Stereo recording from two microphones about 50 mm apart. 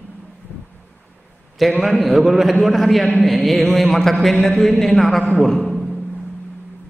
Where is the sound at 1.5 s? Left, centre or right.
Centre.